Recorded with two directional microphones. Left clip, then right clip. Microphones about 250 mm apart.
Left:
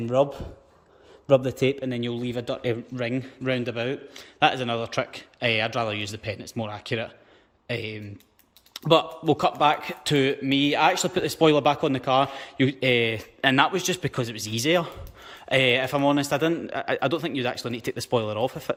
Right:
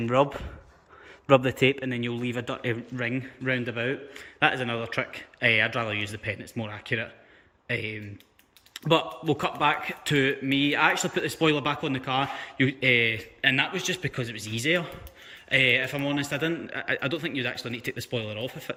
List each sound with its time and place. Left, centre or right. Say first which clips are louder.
0.0 s a man's voice: left 1 dB; right
1.3 s a man's voice: even; centre